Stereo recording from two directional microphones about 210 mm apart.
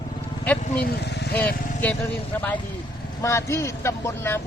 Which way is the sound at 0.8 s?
50° left (ahead or behind).